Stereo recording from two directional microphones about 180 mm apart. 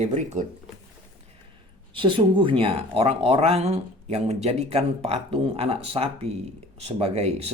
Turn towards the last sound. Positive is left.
turn(degrees=-35)  # may be behind; listen again after turning